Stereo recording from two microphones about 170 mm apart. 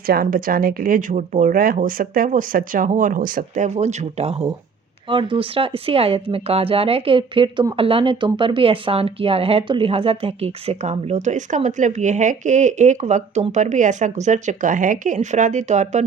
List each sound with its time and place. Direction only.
0.1 s speech: 60° right (ahead or behind); by 16.0 s 45° right (ahead or behind)